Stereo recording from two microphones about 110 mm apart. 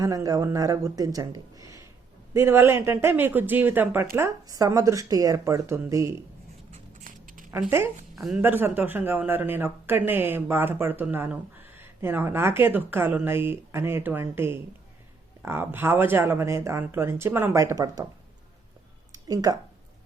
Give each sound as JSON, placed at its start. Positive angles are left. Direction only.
{"t": 0.0, "sound": "speech", "side_deg": -30}
{"t": 4.4, "sound": "speech", "side_deg": -35}
{"t": 7.7, "sound": "speech", "side_deg": -20}
{"t": 8.1, "sound": "a sound", "side_deg": 0}
{"t": 8.4, "sound": "speech", "side_deg": -20}
{"t": 19.1, "sound": "a sound", "side_deg": -35}